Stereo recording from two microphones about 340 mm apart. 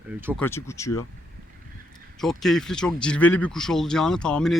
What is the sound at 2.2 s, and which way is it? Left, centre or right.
Speech, centre.